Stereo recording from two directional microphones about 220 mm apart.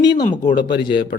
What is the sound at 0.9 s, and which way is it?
Speech, 40° left (ahead or behind).